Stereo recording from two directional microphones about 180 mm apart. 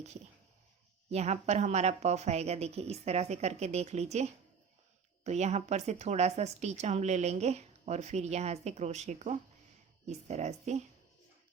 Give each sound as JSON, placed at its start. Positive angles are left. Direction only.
{"t": 1.1, "sound": "speech", "side_deg": -40}